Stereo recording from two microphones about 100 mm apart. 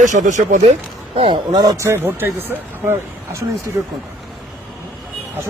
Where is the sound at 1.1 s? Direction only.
70° right (ahead or behind).